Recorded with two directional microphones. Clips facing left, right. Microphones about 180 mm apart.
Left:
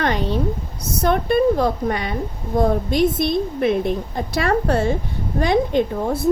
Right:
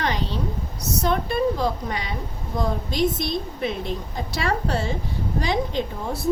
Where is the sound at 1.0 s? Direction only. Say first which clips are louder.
Left 6 dB; 55° left (ahead or behind).